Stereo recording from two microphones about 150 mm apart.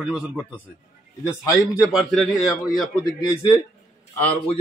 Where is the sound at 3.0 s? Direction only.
30° left (ahead or behind).